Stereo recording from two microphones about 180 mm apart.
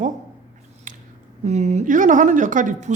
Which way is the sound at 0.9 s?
45° right (ahead or behind).